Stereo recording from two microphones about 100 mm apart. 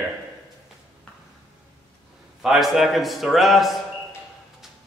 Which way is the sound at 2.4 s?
Centre (ahead or behind).